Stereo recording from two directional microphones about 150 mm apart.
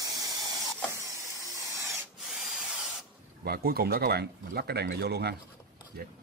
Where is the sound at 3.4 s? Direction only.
90° right.